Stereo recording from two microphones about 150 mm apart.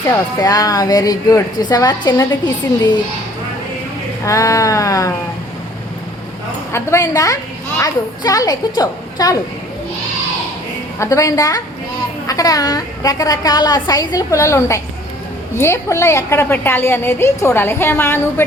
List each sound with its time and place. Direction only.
0.0 s a woman's voice: 25° left (ahead or behind)
4.3 s a woman's voice: 20° left (ahead or behind)
6.7 s a woman's voice: 20° left (ahead or behind)
11.0 s a woman's voice: 20° left (ahead or behind)